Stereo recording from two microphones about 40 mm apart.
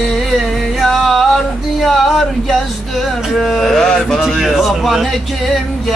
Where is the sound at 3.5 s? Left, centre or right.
Centre.